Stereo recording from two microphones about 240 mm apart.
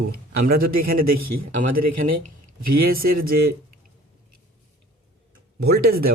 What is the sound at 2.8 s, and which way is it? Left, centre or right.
Speech, right.